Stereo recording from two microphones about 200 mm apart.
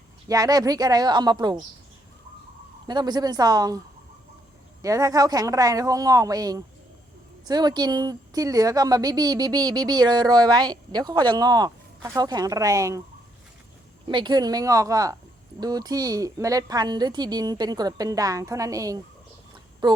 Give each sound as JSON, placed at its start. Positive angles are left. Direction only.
{"t": 0.3, "sound": "speech", "side_deg": -20}
{"t": 2.8, "sound": "speech", "side_deg": -20}
{"t": 4.8, "sound": "speech", "side_deg": -15}
{"t": 14.1, "sound": "speech", "side_deg": -25}